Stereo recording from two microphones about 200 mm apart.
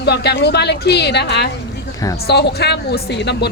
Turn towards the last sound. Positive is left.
turn(degrees=60)  # may be behind; listen again after turning